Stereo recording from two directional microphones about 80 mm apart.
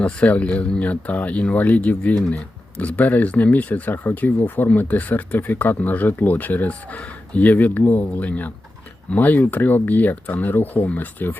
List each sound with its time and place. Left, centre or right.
0.0 s speech: centre